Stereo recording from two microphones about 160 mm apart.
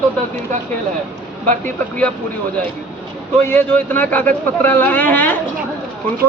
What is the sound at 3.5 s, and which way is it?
A man's voice, 10° left (ahead or behind).